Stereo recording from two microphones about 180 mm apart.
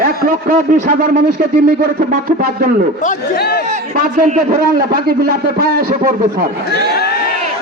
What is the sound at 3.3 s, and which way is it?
Speech, 60° left (ahead or behind).